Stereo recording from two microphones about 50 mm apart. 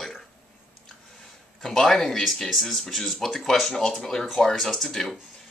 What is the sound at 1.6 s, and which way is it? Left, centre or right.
Speech, centre.